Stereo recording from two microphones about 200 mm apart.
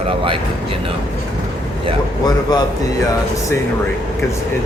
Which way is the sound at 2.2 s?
20° left (ahead or behind).